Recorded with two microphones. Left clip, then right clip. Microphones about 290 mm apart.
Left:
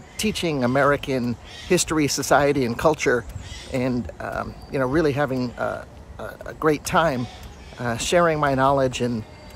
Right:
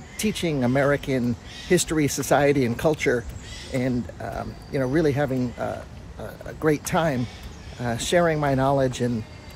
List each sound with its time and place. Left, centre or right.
0.2 s speech: centre